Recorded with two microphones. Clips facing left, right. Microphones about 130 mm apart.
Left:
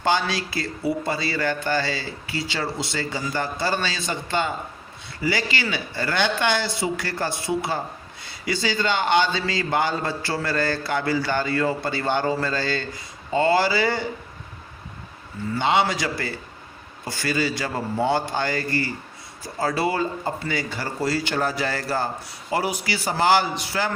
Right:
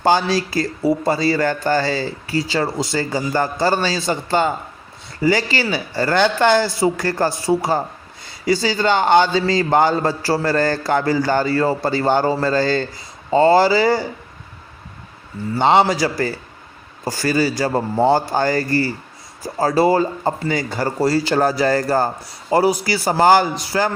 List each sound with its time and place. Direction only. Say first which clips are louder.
0.0 s a man's voice: right 6 dB; 40° right (ahead or behind)
15.5 s a man's voice: right 7 dB; 40° right (ahead or behind)